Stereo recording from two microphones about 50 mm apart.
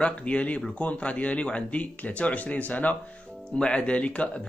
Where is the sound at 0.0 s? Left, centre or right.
Left.